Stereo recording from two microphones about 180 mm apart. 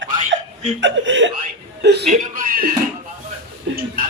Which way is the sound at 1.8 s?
65° right (ahead or behind).